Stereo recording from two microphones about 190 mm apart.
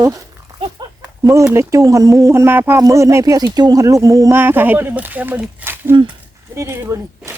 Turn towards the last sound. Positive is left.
turn(degrees=-15)  # may be behind; listen again after turning